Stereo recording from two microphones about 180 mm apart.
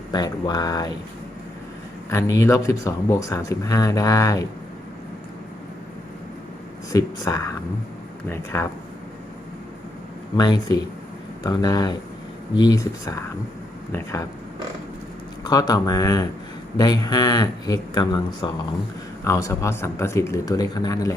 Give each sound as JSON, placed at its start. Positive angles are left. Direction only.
{"t": 0.1, "sound": "a man's voice", "side_deg": 20}
{"t": 2.0, "sound": "speech", "side_deg": 15}
{"t": 6.9, "sound": "speech", "side_deg": 15}
{"t": 10.3, "sound": "a man's voice", "side_deg": 20}
{"t": 15.4, "sound": "a man's voice", "side_deg": 20}